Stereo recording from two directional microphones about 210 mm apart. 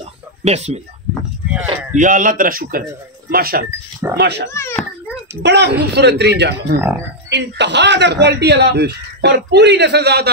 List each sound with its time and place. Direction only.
0.4 s speech: 30° right (ahead or behind)
1.5 s a sound: 5° right (ahead or behind)
2.0 s a man's voice: 40° right (ahead or behind)
4.6 s a child's voice: 10° left (ahead or behind)
5.4 s speech: 55° right (ahead or behind)